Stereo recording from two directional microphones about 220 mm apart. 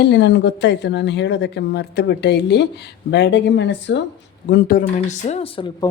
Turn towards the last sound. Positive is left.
turn(degrees=25)  # may be behind; listen again after turning